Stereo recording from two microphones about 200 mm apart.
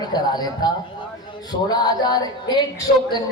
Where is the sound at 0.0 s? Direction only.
20° left (ahead or behind).